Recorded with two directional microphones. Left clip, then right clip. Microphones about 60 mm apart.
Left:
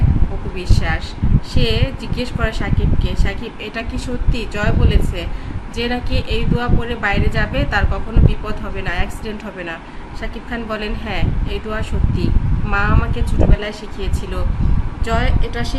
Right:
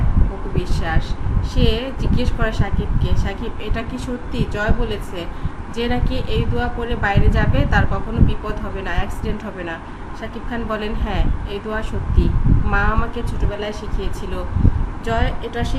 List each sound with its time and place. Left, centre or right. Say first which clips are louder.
0.5 s speech: left 2 dB; centre